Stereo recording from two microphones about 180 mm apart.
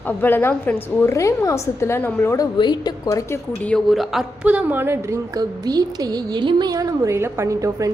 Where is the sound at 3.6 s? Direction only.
Centre (ahead or behind); by 7.9 s 20° right (ahead or behind).